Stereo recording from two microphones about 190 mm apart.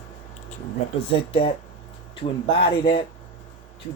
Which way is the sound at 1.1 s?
30° left (ahead or behind).